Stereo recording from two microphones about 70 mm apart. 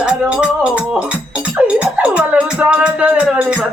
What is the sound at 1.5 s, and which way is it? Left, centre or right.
Music, right.